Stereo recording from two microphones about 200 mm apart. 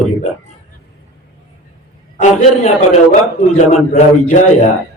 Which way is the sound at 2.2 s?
35° left (ahead or behind).